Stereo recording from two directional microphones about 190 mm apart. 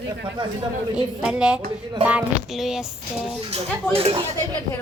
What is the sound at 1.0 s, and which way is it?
Speech, 5° right (ahead or behind).